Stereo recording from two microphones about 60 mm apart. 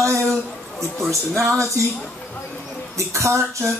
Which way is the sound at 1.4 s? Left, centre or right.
Right.